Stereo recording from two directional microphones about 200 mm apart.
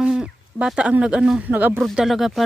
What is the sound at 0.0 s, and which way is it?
Speech, 5° right (ahead or behind).